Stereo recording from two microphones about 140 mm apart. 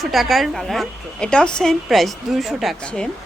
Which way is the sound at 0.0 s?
Centre (ahead or behind).